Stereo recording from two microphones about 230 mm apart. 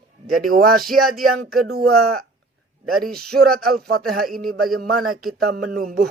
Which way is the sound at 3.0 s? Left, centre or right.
Right.